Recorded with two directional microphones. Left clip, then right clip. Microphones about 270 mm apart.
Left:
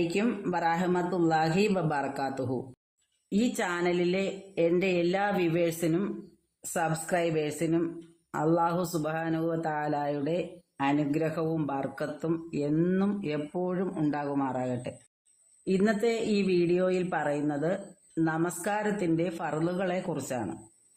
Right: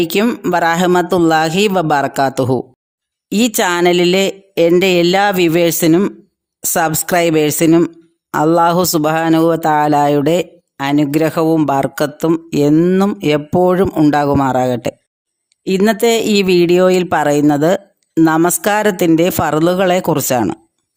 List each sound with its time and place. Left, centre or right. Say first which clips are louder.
0.1 s speech: right 15 dB; right